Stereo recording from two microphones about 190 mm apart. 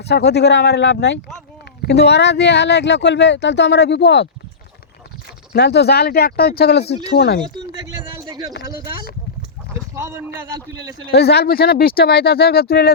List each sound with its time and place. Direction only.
0.0 s speech: 60° left (ahead or behind)
5.5 s speech: 60° left (ahead or behind)
6.8 s speech: 35° left (ahead or behind)
7.2 s speech: 60° left (ahead or behind)
7.9 s a sound: 20° right (ahead or behind)
9.9 s a man's voice: 15° right (ahead or behind)
10.8 s speech: 60° left (ahead or behind)